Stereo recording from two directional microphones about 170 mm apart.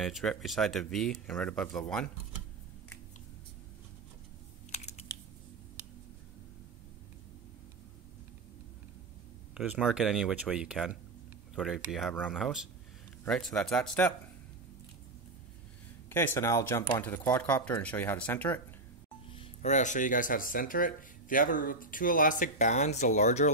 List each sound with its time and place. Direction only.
0.0 s speech: centre (ahead or behind)
4.6 s computer keyboard: 40° left (ahead or behind)
9.5 s speech: 5° right (ahead or behind)
16.1 s speech: 15° left (ahead or behind)
19.3 s speech: 35° left (ahead or behind)